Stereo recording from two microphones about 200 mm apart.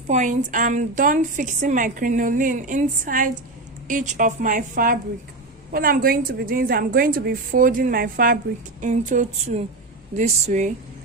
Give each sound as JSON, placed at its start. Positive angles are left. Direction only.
{"t": 0.1, "sound": "a woman's voice", "side_deg": -40}